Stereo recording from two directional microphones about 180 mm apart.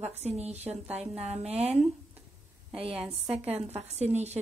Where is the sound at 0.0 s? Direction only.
35° right (ahead or behind).